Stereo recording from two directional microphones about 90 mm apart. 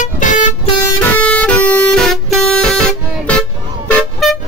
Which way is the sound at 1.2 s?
15° left (ahead or behind).